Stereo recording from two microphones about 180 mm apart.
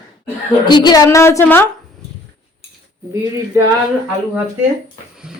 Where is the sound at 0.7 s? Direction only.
25° left (ahead or behind).